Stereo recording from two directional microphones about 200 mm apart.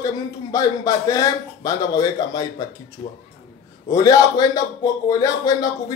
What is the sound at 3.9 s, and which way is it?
A man's voice, 15° left (ahead or behind).